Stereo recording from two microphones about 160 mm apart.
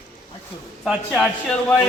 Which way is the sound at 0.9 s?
Centre (ahead or behind).